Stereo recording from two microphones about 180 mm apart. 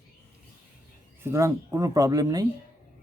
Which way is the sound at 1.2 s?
15° right (ahead or behind).